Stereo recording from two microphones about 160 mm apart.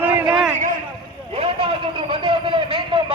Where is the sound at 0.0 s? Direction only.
10° right (ahead or behind).